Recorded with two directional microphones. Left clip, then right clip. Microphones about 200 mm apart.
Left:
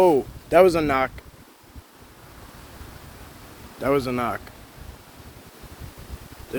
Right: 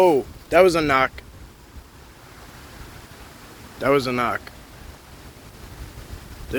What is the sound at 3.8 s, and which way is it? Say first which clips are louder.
Speech: right 3 dB; 10° left (ahead or behind).